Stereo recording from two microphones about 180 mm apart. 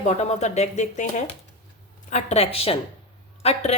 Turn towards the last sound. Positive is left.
turn(degrees=35)  # may be behind; listen again after turning